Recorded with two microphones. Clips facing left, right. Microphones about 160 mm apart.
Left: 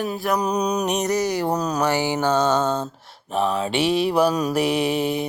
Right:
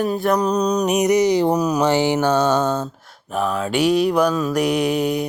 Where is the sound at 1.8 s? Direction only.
20° right (ahead or behind); by 3.4 s 5° right (ahead or behind).